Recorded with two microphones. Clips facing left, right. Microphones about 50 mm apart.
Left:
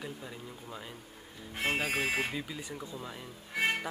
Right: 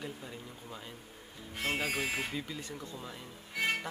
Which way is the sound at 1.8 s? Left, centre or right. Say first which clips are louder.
Left 3 dB; left.